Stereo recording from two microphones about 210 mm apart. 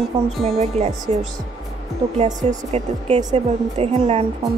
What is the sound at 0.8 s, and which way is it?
Speech, 30° right (ahead or behind).